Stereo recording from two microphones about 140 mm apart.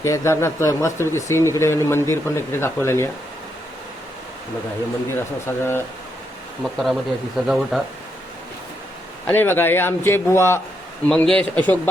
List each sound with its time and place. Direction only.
0.0 s speech: 20° left (ahead or behind)
5.5 s speech: 15° left (ahead or behind)
6.6 s speech: centre (ahead or behind)
9.2 s speech: 15° left (ahead or behind)
11.1 s speech: 5° left (ahead or behind)